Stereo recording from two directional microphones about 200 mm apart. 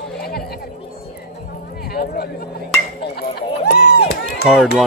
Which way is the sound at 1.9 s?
50° left (ahead or behind).